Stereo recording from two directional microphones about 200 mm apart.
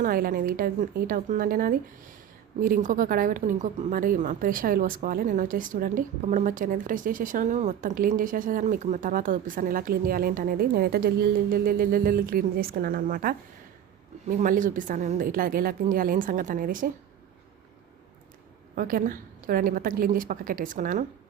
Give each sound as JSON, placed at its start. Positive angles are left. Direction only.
{"t": 0.0, "sound": "a woman's voice", "side_deg": -45}
{"t": 18.8, "sound": "a woman's voice", "side_deg": -45}